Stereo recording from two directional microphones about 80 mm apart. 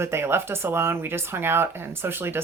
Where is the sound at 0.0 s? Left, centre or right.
Right.